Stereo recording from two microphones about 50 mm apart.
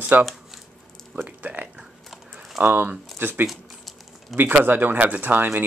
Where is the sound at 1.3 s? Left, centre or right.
Right.